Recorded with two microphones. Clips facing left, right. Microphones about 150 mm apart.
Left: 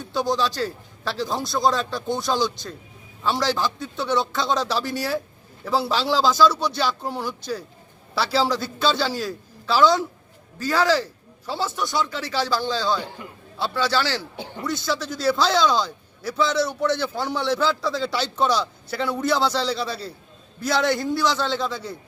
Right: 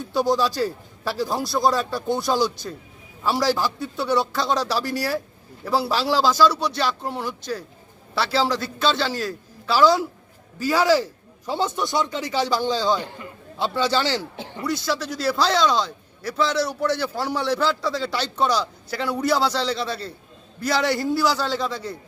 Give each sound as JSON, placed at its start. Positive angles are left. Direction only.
{"t": 0.0, "sound": "a man's voice", "side_deg": -10}
{"t": 14.3, "sound": "speech", "side_deg": 0}